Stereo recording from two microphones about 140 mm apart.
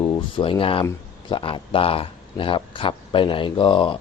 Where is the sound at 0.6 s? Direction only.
40° left (ahead or behind).